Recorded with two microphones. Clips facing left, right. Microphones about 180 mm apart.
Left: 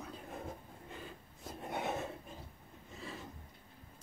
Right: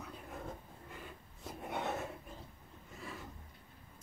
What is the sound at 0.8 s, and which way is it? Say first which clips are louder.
Rub: left 2 dB; 30° left (ahead or behind).